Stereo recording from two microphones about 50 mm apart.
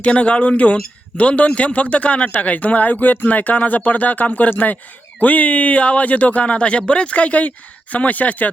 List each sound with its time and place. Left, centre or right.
0.0 s speech: left